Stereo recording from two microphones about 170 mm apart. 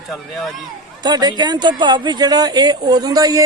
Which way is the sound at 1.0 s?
25° right (ahead or behind).